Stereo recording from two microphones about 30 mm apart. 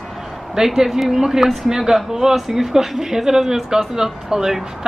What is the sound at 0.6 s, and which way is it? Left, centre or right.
Speech, centre.